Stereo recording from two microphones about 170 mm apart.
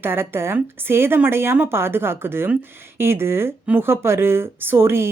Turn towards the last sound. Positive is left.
turn(degrees=-15)  # may be behind; listen again after turning